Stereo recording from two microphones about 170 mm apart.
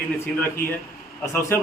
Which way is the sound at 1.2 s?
15° left (ahead or behind).